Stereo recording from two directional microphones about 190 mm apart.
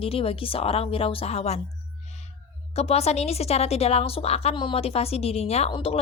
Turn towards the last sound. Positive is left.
turn(degrees=30)  # may be behind; listen again after turning